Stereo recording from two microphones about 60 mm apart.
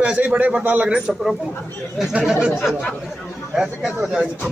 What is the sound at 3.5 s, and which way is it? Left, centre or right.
Speech, centre.